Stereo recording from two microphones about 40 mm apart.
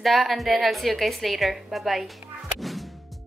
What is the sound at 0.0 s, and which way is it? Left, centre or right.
A woman's voice, centre.